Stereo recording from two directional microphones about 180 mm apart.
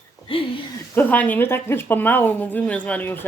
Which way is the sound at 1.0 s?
10° left (ahead or behind).